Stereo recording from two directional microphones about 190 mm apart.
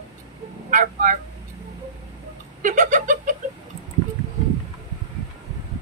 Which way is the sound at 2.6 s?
40° right (ahead or behind).